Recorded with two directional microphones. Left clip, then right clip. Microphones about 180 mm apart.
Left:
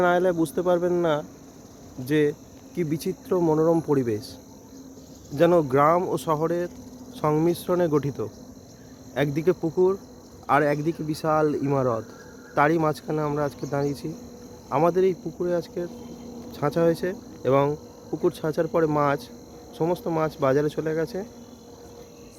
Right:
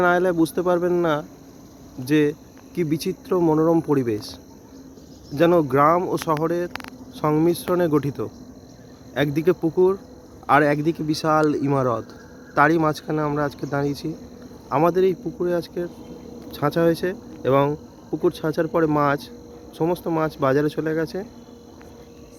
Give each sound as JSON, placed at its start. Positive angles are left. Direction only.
{"t": 0.0, "sound": "speech", "side_deg": 0}